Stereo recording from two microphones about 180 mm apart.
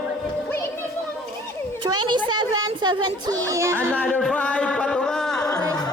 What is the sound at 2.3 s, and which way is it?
A woman's voice, 25° right (ahead or behind).